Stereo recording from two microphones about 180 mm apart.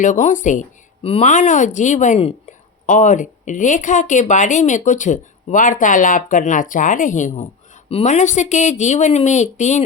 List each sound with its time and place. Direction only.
0.0 s a woman's voice: 45° left (ahead or behind)